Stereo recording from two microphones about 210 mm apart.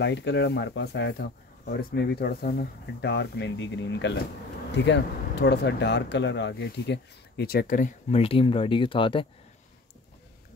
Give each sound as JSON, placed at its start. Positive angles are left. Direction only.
{"t": 0.0, "sound": "speech", "side_deg": 55}
{"t": 8.1, "sound": "speech", "side_deg": 25}